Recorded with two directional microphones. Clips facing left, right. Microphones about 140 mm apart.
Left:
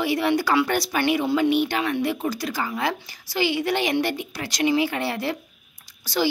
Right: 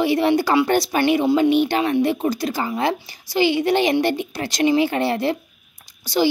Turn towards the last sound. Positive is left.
turn(degrees=-15)  # may be behind; listen again after turning